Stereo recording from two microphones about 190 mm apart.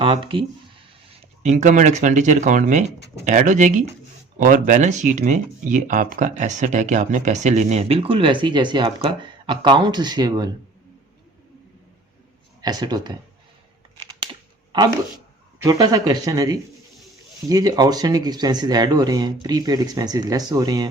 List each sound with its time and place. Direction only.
0.0 s speech: 25° right (ahead or behind)
1.4 s speech: 40° right (ahead or behind); by 10.5 s 20° right (ahead or behind)
12.6 s speech: 20° right (ahead or behind)
14.7 s speech: 20° right (ahead or behind)